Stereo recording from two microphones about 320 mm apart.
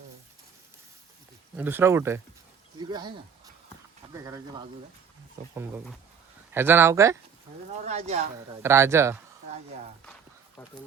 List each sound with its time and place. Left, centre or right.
1.5 s speech: centre
5.5 s speech: centre
7.7 s speech: centre
8.6 s speech: centre